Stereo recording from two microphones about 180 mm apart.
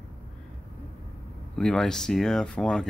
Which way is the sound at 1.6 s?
5° left (ahead or behind).